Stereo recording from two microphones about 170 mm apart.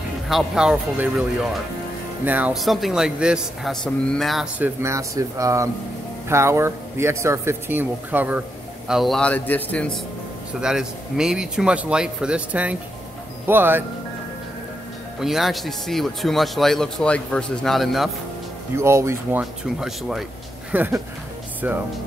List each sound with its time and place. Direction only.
0.3 s speech: centre (ahead or behind)
10.6 s speech: 5° right (ahead or behind)
15.1 s speech: centre (ahead or behind)
18.8 s speech: 15° right (ahead or behind)
19.6 s speech: 5° right (ahead or behind)